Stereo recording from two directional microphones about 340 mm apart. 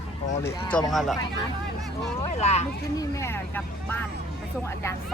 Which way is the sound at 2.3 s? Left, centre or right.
Centre.